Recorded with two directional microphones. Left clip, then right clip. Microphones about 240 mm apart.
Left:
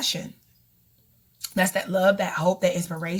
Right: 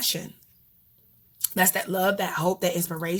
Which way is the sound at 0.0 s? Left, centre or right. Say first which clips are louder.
Left 1 dB; right.